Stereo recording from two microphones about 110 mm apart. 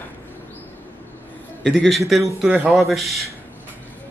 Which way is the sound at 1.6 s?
5° left (ahead or behind).